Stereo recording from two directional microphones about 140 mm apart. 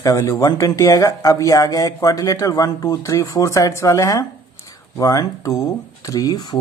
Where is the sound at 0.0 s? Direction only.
20° left (ahead or behind).